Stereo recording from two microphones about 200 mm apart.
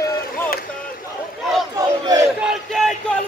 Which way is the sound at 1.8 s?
15° right (ahead or behind).